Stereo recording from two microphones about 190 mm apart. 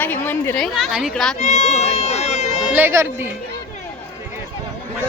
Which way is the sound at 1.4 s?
35° left (ahead or behind).